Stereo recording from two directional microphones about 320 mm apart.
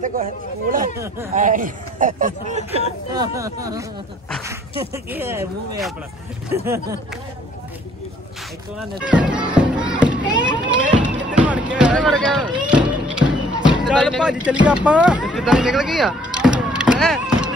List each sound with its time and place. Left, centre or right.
0.0 s speech: right
0.9 s speech: centre
1.3 s speech: right; by 7.0 s centre
9.0 s music: centre
13.8 s speech: centre